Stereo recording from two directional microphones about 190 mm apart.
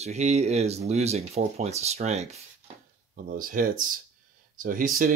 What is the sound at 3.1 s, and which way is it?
Speech, 45° right (ahead or behind).